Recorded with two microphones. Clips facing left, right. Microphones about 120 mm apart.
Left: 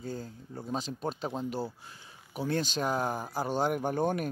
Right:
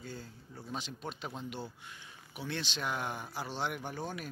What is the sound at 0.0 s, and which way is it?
Speech, 40° left (ahead or behind).